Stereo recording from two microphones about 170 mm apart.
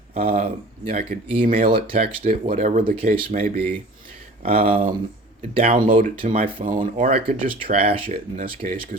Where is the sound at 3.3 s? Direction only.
60° right (ahead or behind).